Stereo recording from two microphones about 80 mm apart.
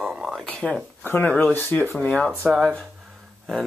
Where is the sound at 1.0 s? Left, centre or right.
Left.